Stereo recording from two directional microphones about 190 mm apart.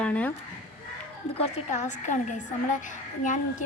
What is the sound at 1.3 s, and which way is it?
Speech, 35° left (ahead or behind).